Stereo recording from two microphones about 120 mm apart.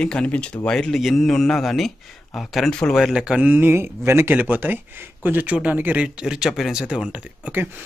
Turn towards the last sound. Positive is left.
turn(degrees=-15)  # may be behind; listen again after turning